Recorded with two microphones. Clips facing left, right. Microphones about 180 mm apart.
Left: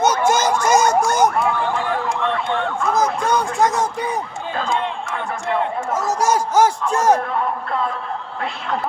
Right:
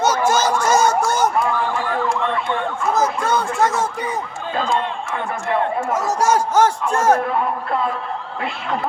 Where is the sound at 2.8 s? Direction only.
5° right (ahead or behind).